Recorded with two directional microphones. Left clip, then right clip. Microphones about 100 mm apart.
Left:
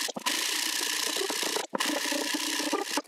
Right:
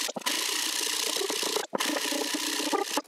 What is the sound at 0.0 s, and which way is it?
Rub, centre (ahead or behind).